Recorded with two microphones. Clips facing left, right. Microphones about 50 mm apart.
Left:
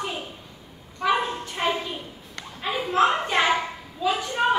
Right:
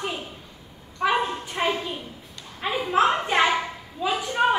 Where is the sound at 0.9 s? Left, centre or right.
Centre.